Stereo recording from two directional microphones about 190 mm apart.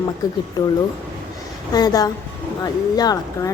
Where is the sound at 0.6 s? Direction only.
20° left (ahead or behind).